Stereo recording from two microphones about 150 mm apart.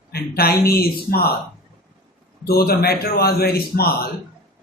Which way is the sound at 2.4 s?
90° left.